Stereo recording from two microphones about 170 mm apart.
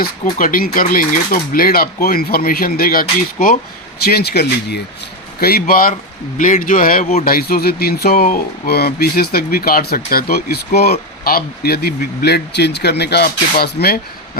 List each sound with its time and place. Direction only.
0.0 s speech: 55° left (ahead or behind)
4.0 s speech: 70° left (ahead or behind)